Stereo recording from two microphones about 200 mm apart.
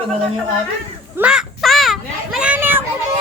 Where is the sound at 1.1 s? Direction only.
5° right (ahead or behind).